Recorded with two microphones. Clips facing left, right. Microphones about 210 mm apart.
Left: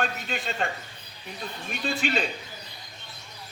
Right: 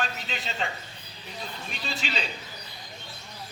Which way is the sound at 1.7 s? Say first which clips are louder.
Left 8 dB; 55° left (ahead or behind).